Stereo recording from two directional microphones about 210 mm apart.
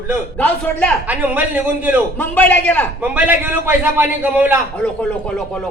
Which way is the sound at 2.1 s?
10° left (ahead or behind).